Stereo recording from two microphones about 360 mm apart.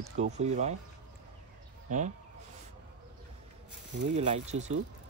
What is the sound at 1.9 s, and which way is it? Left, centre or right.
Speech, right.